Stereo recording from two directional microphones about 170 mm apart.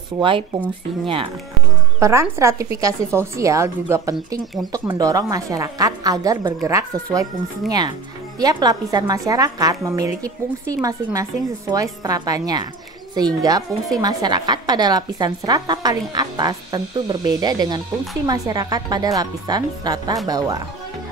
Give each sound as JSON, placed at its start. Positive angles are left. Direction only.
{"t": 0.2, "sound": "speech", "side_deg": -30}
{"t": 2.0, "sound": "a woman's voice", "side_deg": -15}